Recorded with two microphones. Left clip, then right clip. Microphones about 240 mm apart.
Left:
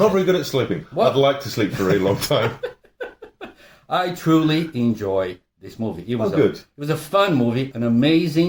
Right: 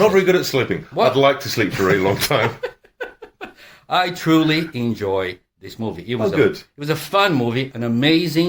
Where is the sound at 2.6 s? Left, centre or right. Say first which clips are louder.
Right 2 dB; centre.